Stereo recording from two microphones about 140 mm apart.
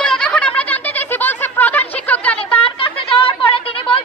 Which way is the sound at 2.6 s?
40° left (ahead or behind).